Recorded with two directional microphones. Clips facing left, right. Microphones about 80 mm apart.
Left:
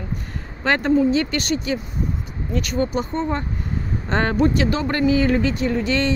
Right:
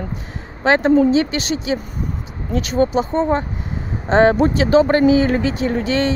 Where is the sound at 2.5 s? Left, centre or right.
Right.